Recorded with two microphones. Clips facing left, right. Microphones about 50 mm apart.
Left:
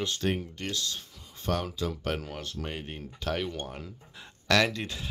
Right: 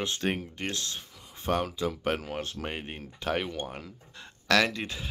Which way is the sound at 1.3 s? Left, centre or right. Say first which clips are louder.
Right 2 dB; centre.